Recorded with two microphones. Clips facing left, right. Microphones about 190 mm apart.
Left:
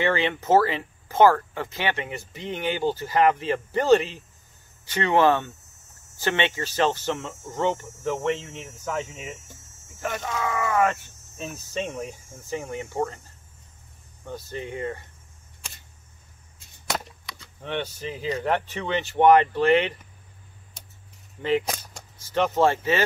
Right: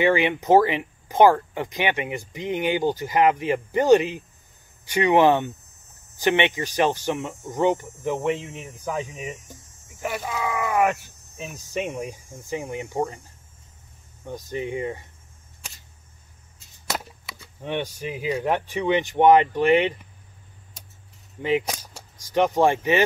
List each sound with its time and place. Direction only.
0.0 s speech: 15° right (ahead or behind)
16.9 s chop: 5° right (ahead or behind)
17.6 s speech: 15° right (ahead or behind)
21.4 s speech: 15° right (ahead or behind)